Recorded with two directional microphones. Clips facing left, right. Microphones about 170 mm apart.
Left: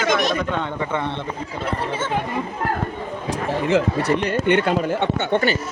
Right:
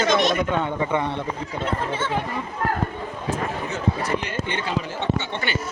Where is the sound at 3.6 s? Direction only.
80° left.